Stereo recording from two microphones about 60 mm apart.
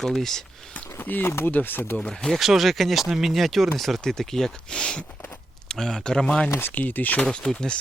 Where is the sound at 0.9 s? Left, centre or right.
Left.